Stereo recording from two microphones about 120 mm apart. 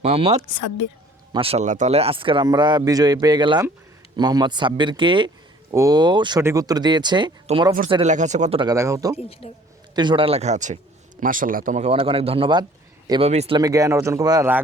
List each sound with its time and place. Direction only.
0.0 s speech: 60° right (ahead or behind)
1.6 s a man's voice: 90° right; by 5.3 s 40° right (ahead or behind)
5.7 s a man's voice: 30° right (ahead or behind)
6.4 s a man's voice: 25° right (ahead or behind)
8.0 s speech: 80° right
8.7 s speech: 25° right (ahead or behind)
9.1 s speech: 55° left (ahead or behind)
9.9 s speech: 40° right (ahead or behind); by 11.9 s 90° right
11.9 s speech: 50° right (ahead or behind)
13.2 s speech: 60° right (ahead or behind)
13.6 s speech: 30° right (ahead or behind)